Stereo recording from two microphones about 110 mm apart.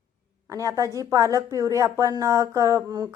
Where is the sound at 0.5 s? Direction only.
30° right (ahead or behind).